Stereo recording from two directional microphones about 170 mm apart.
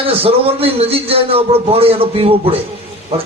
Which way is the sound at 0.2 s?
35° right (ahead or behind).